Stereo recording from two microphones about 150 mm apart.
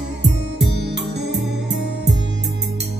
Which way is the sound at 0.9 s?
90° right.